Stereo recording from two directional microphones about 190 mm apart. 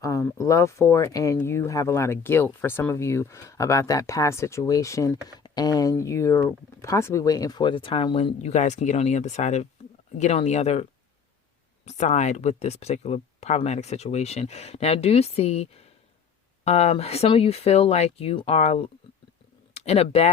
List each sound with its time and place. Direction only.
0.0 s speech: 15° left (ahead or behind); by 10.8 s 35° left (ahead or behind)
11.9 s speech: 35° left (ahead or behind)